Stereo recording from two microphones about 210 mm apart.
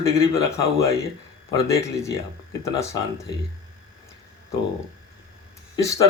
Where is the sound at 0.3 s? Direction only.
15° left (ahead or behind).